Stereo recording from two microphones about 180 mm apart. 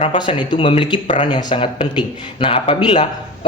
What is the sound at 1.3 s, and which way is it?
Speech, 25° left (ahead or behind).